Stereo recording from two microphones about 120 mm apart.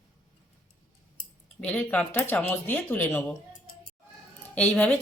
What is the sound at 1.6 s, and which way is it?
Speech, 10° left (ahead or behind).